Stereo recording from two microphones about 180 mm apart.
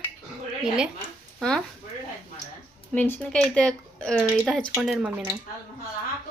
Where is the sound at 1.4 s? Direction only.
5° left (ahead or behind).